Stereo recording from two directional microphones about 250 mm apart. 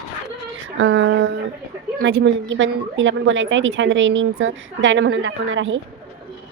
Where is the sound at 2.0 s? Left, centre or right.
Right.